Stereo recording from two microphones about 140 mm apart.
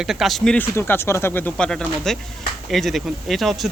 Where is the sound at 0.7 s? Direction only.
15° left (ahead or behind).